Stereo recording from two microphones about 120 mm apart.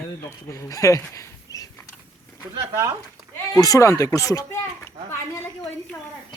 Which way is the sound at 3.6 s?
30° left (ahead or behind).